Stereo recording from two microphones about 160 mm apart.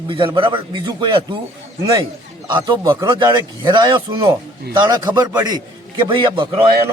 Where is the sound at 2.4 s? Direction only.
30° right (ahead or behind).